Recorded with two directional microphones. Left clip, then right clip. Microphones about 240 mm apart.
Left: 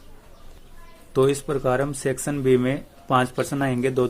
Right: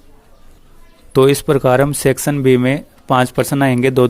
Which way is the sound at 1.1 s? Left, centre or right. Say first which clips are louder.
Right 9 dB; right.